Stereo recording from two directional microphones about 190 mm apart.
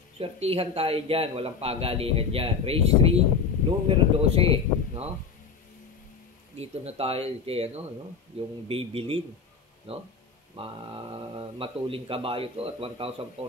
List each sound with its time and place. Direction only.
0.2 s a man's voice: 30° right (ahead or behind)
6.6 s a man's voice: 35° right (ahead or behind)